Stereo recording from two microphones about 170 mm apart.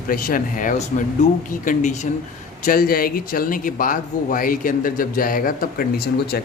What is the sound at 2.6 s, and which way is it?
Speech, 60° left (ahead or behind).